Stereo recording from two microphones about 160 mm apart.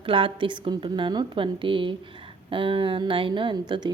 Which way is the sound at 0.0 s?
35° right (ahead or behind).